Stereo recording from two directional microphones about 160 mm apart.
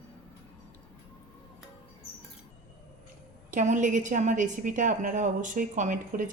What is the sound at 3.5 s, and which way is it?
A woman's voice, 50° right (ahead or behind).